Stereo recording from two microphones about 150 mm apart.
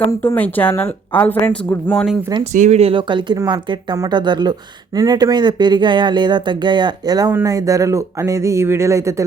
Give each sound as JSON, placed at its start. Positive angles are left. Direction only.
{"t": 0.2, "sound": "speech", "side_deg": 10}
{"t": 2.4, "sound": "speech", "side_deg": -50}
{"t": 7.3, "sound": "speech", "side_deg": -15}